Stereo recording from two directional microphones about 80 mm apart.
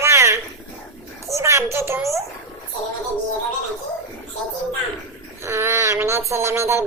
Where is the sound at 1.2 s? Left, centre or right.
Right.